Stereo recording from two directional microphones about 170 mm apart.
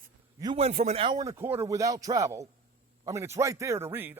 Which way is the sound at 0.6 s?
40° right (ahead or behind).